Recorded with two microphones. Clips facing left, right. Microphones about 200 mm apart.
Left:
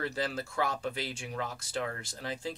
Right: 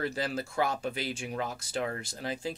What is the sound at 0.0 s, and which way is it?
Speech, 10° right (ahead or behind).